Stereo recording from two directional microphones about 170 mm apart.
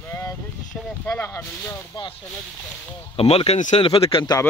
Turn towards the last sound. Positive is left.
turn(degrees=30)  # may be behind; listen again after turning